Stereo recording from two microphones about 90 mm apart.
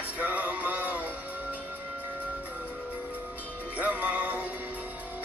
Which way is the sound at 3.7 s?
15° right (ahead or behind).